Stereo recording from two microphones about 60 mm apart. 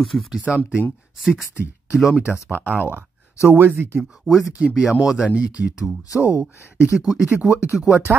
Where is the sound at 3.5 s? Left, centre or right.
Right.